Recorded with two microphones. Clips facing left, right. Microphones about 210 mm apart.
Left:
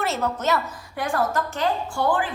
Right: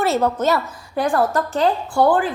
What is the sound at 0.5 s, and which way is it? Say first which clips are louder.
A woman's voice: right 4 dB; 35° right (ahead or behind).